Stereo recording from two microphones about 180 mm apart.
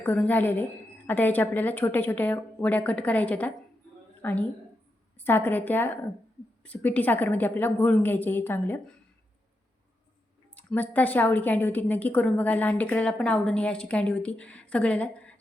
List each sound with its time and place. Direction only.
0.0 s a woman's voice: 10° left (ahead or behind)
10.5 s a woman's voice: 10° left (ahead or behind)